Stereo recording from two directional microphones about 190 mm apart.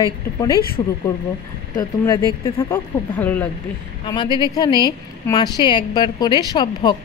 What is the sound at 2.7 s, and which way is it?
Speech, 10° left (ahead or behind).